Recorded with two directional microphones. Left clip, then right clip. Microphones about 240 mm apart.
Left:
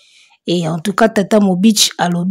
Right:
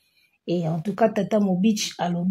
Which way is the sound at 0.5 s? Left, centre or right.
Left.